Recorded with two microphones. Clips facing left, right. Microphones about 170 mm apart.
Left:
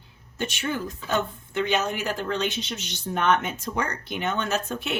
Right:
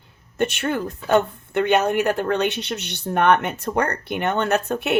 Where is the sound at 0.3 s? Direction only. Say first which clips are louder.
Right 6 dB; 60° right (ahead or behind).